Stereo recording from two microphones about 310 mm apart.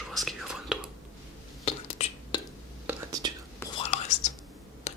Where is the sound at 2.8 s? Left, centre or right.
Centre.